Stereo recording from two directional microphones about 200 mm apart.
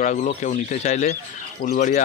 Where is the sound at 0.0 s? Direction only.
35° left (ahead or behind).